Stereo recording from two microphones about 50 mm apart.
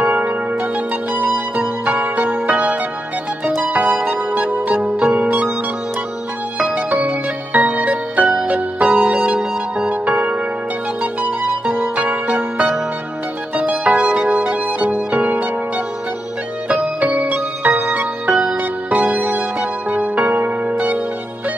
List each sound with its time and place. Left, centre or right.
0.0 s music: right
6.9 s music: right
16.6 s music: right